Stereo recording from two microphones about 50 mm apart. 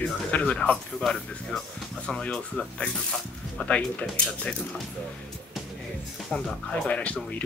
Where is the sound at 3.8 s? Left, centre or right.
Left.